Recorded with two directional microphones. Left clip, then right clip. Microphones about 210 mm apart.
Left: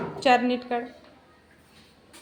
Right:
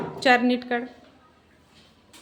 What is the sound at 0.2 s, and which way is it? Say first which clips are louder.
Speech: right 1 dB; 15° right (ahead or behind).